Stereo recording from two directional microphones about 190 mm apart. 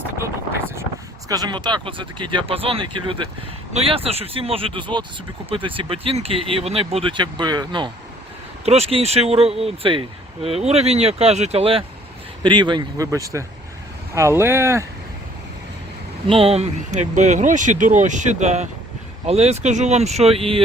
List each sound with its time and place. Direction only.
1.3 s speech: 20° right (ahead or behind)
8.6 s speech: 35° right (ahead or behind); by 14.8 s 15° right (ahead or behind)
16.2 s speech: 30° right (ahead or behind)